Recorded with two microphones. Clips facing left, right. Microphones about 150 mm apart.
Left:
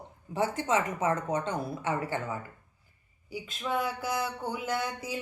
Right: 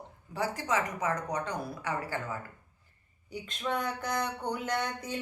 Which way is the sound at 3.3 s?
5° left (ahead or behind).